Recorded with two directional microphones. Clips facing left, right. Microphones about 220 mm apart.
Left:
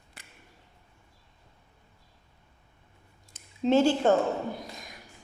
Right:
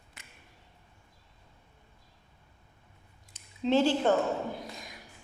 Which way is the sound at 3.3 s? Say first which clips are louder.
Left 3 dB; 45° left (ahead or behind).